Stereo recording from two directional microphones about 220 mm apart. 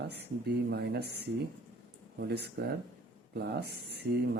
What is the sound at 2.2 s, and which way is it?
Speech, 45° right (ahead or behind).